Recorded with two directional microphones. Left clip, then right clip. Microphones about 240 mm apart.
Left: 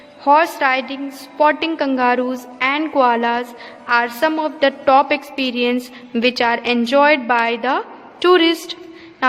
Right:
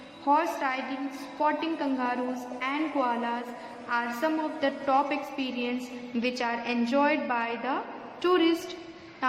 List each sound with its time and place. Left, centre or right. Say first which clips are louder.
0.3 s a woman's voice: left 12 dB; left